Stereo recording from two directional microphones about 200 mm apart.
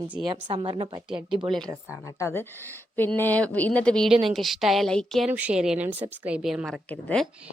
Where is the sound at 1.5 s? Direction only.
5° left (ahead or behind).